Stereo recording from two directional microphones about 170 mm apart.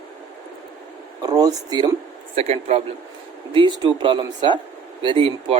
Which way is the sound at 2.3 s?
40° right (ahead or behind).